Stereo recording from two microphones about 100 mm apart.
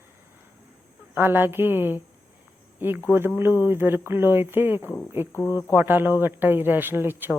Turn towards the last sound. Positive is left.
turn(degrees=-20)  # may be behind; listen again after turning